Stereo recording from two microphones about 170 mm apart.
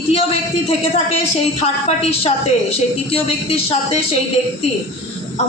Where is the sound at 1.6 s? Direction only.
35° left (ahead or behind).